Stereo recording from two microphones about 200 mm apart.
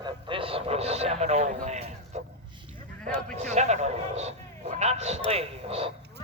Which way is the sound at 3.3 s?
35° right (ahead or behind).